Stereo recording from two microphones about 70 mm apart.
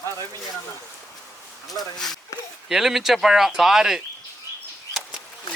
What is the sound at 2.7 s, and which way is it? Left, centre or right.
Speech, centre.